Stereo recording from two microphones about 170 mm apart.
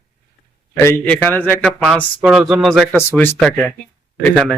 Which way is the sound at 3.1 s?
10° left (ahead or behind).